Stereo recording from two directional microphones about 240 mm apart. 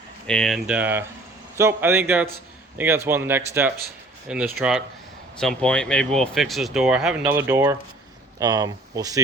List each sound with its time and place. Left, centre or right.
0.3 s speech: centre